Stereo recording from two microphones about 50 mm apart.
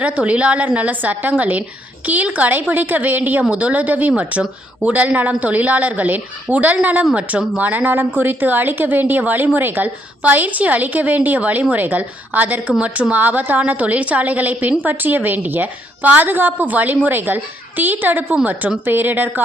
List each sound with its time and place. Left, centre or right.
0.0 s a woman's voice: right